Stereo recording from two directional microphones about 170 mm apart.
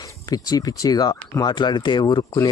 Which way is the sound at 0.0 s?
20° left (ahead or behind).